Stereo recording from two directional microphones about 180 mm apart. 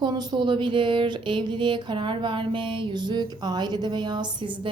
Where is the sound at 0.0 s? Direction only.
25° right (ahead or behind).